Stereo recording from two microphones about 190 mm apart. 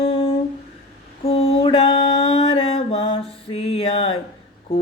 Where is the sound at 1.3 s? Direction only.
30° left (ahead or behind).